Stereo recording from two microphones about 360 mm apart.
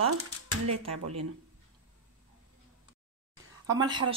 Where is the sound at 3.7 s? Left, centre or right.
Centre.